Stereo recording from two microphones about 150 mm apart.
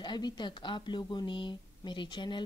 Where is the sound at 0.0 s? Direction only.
30° left (ahead or behind).